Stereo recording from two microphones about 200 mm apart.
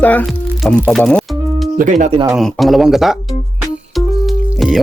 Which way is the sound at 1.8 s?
40° right (ahead or behind).